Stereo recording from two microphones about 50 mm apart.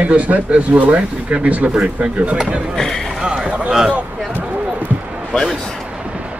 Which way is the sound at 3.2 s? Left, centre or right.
Centre.